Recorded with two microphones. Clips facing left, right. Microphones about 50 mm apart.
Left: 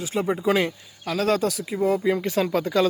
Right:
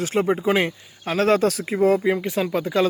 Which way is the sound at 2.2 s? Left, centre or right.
Centre.